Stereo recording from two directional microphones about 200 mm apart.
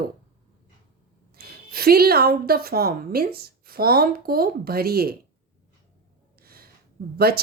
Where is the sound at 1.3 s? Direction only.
50° right (ahead or behind).